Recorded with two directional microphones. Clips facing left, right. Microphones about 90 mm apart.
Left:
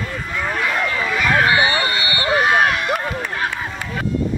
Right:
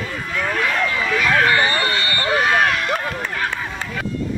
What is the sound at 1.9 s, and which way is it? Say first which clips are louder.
Vehicle: left 1 dB; 5° left (ahead or behind).